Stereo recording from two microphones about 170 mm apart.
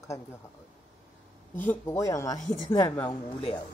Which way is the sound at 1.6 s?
15° left (ahead or behind).